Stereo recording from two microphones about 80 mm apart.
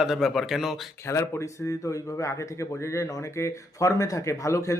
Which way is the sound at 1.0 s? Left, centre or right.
Left.